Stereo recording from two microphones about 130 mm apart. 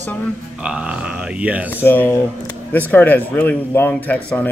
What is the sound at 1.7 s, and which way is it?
Speech, 15° left (ahead or behind).